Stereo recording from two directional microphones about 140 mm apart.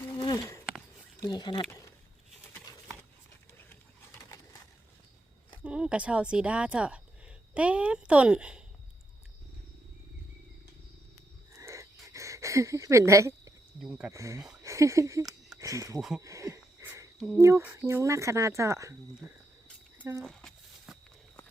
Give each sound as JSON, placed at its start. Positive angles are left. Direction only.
{"t": 1.2, "sound": "speech", "side_deg": 30}
{"t": 5.6, "sound": "speech", "side_deg": -5}
{"t": 11.5, "sound": "a sound", "side_deg": -20}
{"t": 13.8, "sound": "speech", "side_deg": -5}
{"t": 14.1, "sound": "speech", "side_deg": -20}
{"t": 16.0, "sound": "speech", "side_deg": -5}
{"t": 16.2, "sound": "wheeze", "side_deg": -20}
{"t": 17.2, "sound": "speech", "side_deg": 0}
{"t": 17.4, "sound": "speech", "side_deg": -15}
{"t": 20.0, "sound": "speech", "side_deg": -15}
{"t": 20.2, "sound": "a sound", "side_deg": 0}